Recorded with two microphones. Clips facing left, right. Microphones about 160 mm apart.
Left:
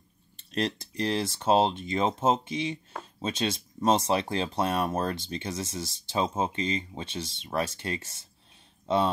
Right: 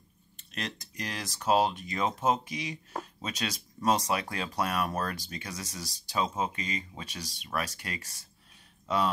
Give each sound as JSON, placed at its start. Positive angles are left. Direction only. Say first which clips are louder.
{"t": 0.4, "sound": "speech", "louder": "left 9 dB", "side_deg": 30}